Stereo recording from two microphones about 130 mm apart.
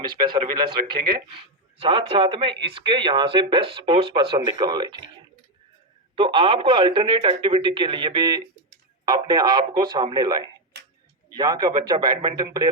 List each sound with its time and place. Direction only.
0.0 s speech: 35° right (ahead or behind)
6.1 s speech: 40° right (ahead or behind)